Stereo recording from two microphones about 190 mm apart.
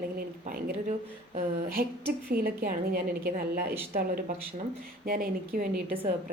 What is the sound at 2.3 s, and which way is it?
A woman's voice, 50° right (ahead or behind).